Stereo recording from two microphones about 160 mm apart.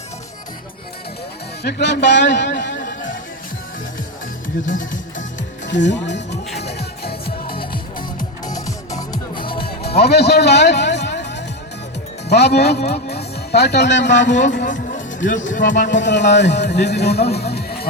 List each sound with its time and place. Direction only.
1.6 s speech: 90° left
4.6 s speech: 55° left (ahead or behind)
5.6 s speech: 90° left
6.6 s music: 90° left
8.4 s music: 20° left (ahead or behind)
10.0 s a man's voice: 90° left
14.7 s music: 55° left (ahead or behind)
15.9 s speech: 90° left